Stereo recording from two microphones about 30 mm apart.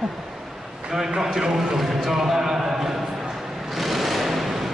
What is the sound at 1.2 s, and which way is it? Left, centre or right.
Speech, centre.